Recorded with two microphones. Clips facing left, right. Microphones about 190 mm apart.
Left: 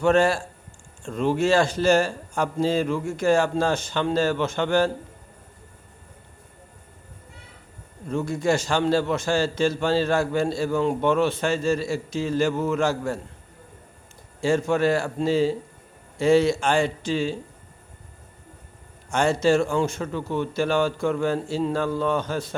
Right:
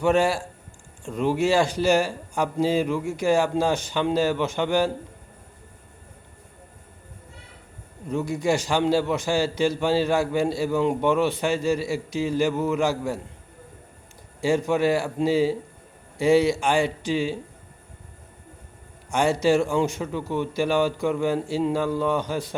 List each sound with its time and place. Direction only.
0.0 s a man's voice: 15° right (ahead or behind)
8.0 s a man's voice: 15° right (ahead or behind)
14.4 s a man's voice: 15° right (ahead or behind)
19.1 s a man's voice: 15° right (ahead or behind)